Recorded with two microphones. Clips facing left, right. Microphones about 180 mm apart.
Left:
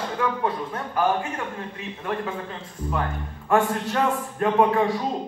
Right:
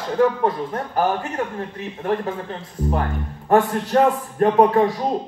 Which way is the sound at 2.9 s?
40° right (ahead or behind).